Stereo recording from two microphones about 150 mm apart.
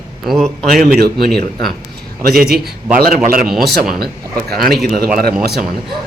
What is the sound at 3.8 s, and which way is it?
Speech, 85° right.